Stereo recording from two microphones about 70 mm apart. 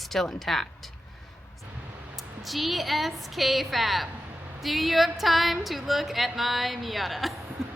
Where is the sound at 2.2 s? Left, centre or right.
Centre.